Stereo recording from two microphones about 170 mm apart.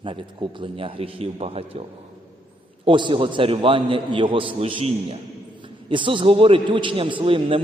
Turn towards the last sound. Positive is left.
turn(degrees=-30)  # may be behind; listen again after turning